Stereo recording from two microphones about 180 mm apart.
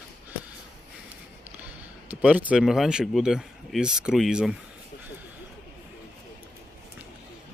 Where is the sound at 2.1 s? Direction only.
10° right (ahead or behind).